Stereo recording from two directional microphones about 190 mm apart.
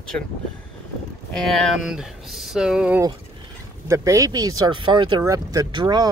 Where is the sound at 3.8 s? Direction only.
15° right (ahead or behind).